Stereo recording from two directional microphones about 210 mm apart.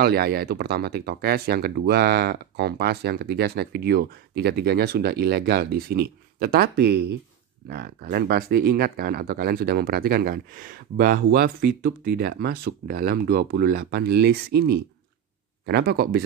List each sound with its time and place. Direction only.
0.0 s speech: 45° right (ahead or behind)